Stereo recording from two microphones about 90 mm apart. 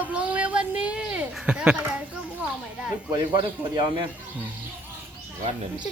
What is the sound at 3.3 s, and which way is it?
Speech, 60° right (ahead or behind).